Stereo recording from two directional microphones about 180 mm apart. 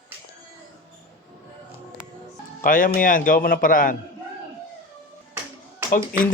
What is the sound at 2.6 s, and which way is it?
Speech, 50° left (ahead or behind).